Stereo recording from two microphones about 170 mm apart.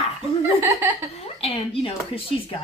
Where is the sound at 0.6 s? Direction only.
15° right (ahead or behind).